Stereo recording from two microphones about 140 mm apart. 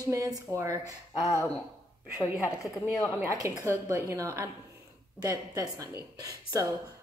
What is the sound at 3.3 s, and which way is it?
A woman's voice, 25° right (ahead or behind).